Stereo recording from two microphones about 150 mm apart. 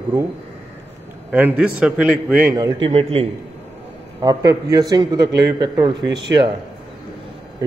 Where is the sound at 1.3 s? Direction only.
10° right (ahead or behind).